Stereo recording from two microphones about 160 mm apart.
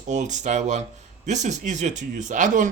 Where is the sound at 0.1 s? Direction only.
50° right (ahead or behind).